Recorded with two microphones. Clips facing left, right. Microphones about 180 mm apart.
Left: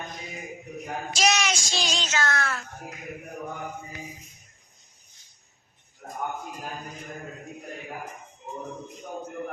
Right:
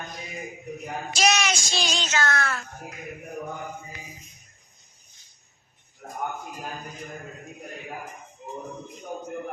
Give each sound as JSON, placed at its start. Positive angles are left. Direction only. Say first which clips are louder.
{"t": 1.1, "sound": "child singing", "louder": "right 1 dB", "side_deg": -60}